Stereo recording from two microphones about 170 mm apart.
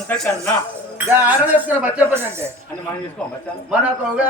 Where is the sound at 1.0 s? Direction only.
10° right (ahead or behind).